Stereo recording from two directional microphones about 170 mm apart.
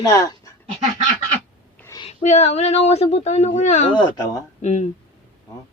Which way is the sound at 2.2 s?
40° left (ahead or behind).